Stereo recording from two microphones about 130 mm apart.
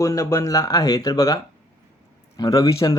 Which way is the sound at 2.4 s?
30° left (ahead or behind).